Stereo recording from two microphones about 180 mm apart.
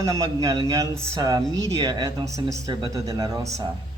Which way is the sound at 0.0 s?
15° right (ahead or behind).